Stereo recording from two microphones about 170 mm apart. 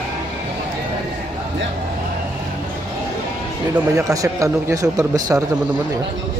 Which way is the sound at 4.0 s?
20° right (ahead or behind).